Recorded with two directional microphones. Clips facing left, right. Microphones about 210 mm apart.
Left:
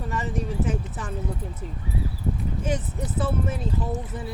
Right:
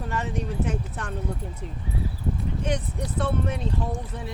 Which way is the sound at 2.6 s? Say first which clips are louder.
Left 1 dB; 5° left (ahead or behind).